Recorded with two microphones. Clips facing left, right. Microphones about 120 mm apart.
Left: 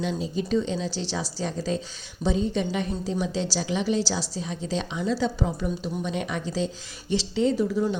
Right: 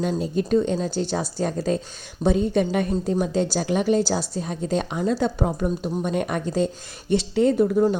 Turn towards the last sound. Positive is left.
turn(degrees=-50)  # may be behind; listen again after turning